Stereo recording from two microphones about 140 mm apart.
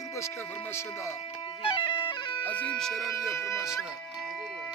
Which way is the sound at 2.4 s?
10° left (ahead or behind).